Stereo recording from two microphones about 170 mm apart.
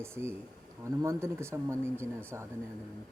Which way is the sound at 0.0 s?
15° right (ahead or behind).